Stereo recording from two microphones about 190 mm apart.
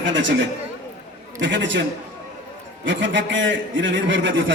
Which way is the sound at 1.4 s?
70° right (ahead or behind).